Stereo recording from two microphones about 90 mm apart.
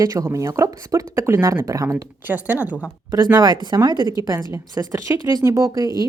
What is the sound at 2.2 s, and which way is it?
Speech, 20° right (ahead or behind).